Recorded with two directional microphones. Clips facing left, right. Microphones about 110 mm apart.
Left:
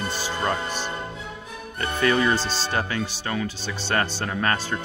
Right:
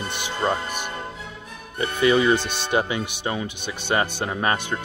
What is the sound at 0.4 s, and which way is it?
Speech, 15° right (ahead or behind).